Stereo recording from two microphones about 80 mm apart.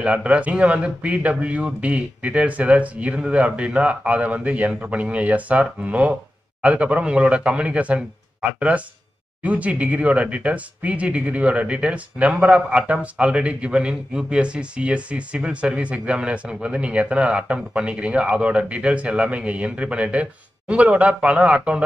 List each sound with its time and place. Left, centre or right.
0.0 s speech: centre